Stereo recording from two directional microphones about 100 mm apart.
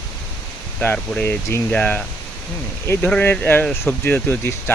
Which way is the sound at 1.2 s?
20° left (ahead or behind).